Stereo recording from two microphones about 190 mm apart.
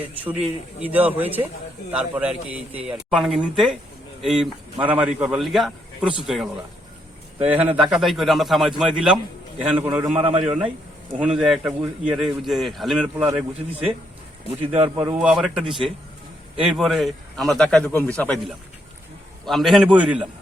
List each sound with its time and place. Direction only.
0.8 s a man's voice: 10° right (ahead or behind)
14.7 s speech: 35° right (ahead or behind)
15.0 s a man's voice: 5° right (ahead or behind)